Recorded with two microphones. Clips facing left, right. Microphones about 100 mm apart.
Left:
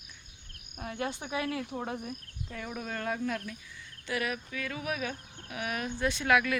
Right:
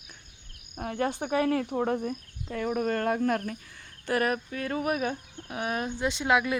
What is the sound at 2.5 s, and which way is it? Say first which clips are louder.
Speech: right 10 dB; 55° right (ahead or behind).